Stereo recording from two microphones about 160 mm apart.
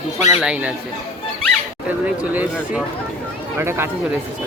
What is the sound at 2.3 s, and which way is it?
Speech, 10° right (ahead or behind).